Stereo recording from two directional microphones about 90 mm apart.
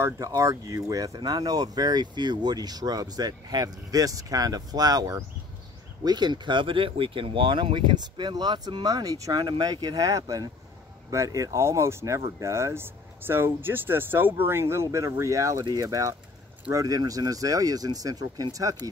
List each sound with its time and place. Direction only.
0.0 s speech: 35° right (ahead or behind)